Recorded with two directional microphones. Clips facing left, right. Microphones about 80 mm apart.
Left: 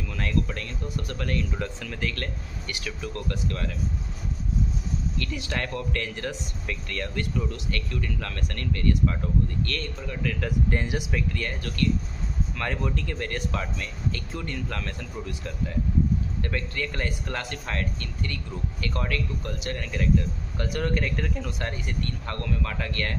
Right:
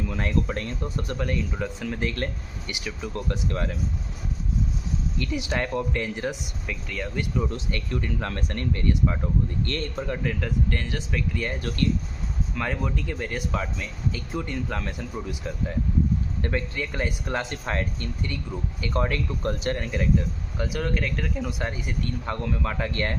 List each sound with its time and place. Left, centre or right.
0.0 s speech: right
1.1 s speech: centre
2.0 s speech: right
5.1 s speech: centre
6.7 s speech: centre
7.3 s speech: right
10.7 s speech: centre
12.5 s speech: centre; by 19.2 s right
19.4 s speech: right
20.6 s speech: centre; by 23.1 s right